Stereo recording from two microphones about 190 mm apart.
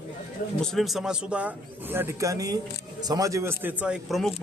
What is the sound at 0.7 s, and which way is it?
Speech, centre (ahead or behind).